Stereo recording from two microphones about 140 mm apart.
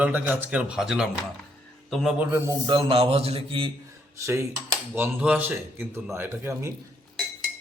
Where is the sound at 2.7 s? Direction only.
40° right (ahead or behind).